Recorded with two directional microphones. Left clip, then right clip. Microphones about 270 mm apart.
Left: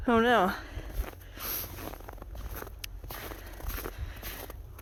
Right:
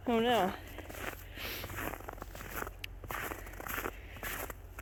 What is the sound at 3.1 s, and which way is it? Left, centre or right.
Walk, centre.